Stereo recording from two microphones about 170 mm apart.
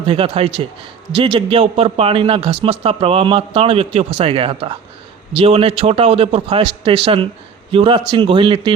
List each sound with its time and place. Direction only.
0.0 s a man's voice: 30° right (ahead or behind)